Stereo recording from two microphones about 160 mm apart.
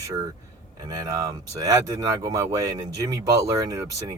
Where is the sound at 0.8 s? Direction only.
25° right (ahead or behind).